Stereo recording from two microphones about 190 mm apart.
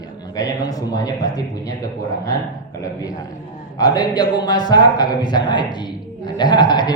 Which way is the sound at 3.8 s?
20° left (ahead or behind).